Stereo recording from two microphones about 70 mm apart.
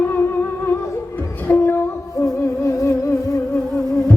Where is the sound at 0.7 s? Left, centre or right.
Left.